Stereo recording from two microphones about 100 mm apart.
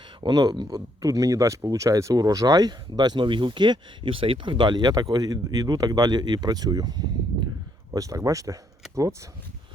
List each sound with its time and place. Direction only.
0.2 s speech: 45° right (ahead or behind)